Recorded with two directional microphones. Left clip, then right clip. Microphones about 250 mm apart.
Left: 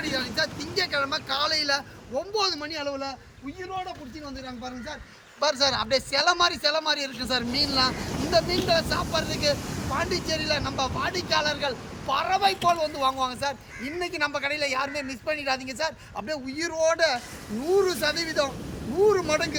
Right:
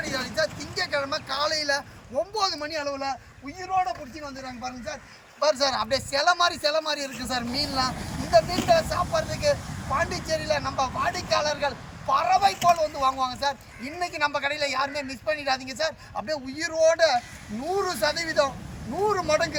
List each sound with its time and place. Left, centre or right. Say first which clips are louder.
0.0 s speech: even; centre
5.4 s a man's voice: right 1 dB; centre